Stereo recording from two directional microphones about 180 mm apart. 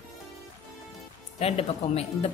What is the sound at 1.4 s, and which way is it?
Speech, 35° left (ahead or behind).